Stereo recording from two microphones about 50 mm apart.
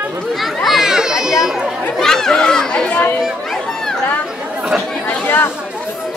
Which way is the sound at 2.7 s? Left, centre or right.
Left.